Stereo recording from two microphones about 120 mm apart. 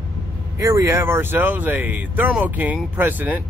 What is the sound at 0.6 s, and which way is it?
Speech, 25° right (ahead or behind).